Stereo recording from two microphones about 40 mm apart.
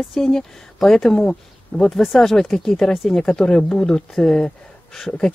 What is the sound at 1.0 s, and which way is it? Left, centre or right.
Speech, left.